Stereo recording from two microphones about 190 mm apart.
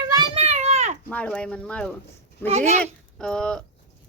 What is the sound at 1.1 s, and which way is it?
Speech, 5° left (ahead or behind).